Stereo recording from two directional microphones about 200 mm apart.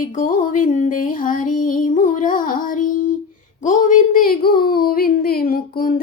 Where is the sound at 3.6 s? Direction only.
40° left (ahead or behind).